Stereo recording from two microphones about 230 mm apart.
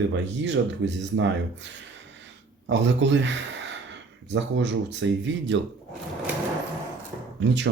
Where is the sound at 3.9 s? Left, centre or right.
Right.